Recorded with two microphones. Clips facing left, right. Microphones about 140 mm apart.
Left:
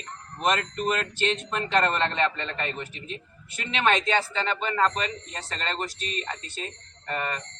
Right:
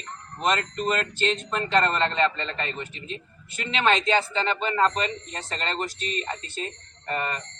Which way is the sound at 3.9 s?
25° right (ahead or behind).